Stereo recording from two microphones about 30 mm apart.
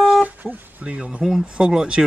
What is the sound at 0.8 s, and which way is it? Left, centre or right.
Speech, right.